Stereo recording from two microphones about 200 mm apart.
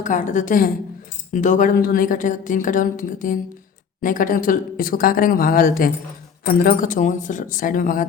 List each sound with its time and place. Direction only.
0.0 s a woman's voice: 40° left (ahead or behind)